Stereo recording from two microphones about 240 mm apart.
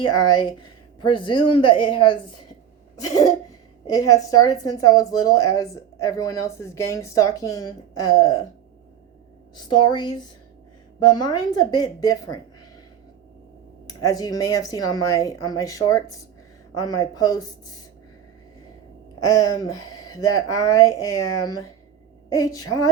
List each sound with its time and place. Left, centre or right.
0.0 s a woman's voice: centre
2.9 s a sound: centre
3.8 s a woman's voice: centre
9.6 s a woman's voice: centre
13.8 s a woman's voice: centre
19.3 s a woman's voice: centre